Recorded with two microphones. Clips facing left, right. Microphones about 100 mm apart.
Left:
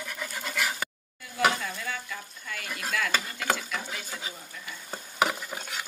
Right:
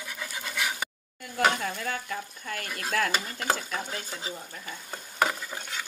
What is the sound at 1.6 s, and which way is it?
Stir, 45° right (ahead or behind).